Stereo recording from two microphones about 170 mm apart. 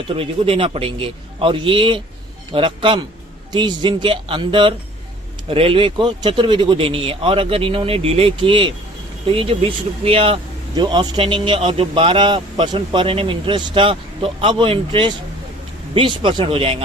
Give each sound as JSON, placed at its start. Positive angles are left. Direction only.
{"t": 0.1, "sound": "speech", "side_deg": -35}